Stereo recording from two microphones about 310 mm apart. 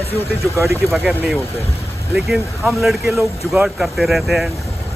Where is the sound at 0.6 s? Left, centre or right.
Centre.